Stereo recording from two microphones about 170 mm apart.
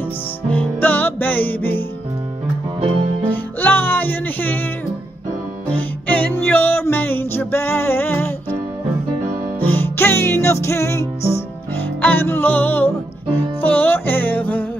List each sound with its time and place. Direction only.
0.5 s music: 10° left (ahead or behind)
3.3 s music: 10° left (ahead or behind)
5.7 s music: 10° left (ahead or behind)
9.6 s music: 10° left (ahead or behind)